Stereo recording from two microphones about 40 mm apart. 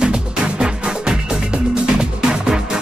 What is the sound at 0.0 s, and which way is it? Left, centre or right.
Music, centre.